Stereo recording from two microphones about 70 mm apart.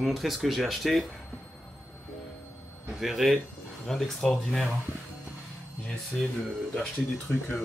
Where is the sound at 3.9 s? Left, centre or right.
Centre.